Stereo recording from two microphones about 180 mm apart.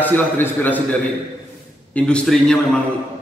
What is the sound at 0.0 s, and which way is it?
Speech, 10° left (ahead or behind).